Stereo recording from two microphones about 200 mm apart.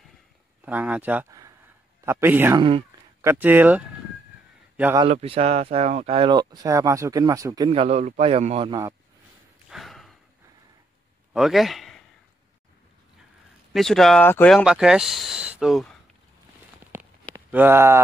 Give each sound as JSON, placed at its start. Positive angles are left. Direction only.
{"t": 0.7, "sound": "speech", "side_deg": -5}
{"t": 4.9, "sound": "speech", "side_deg": -30}
{"t": 9.7, "sound": "sigh", "side_deg": 0}
{"t": 11.3, "sound": "speech", "side_deg": 0}
{"t": 13.7, "sound": "speech", "side_deg": 0}
{"t": 16.9, "sound": "a sound", "side_deg": -10}
{"t": 17.5, "sound": "speech", "side_deg": -10}